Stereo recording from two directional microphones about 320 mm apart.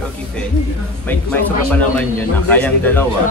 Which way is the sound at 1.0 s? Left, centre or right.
Centre.